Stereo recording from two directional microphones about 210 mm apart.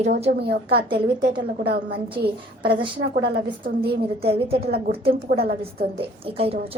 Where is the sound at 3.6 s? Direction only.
50° right (ahead or behind).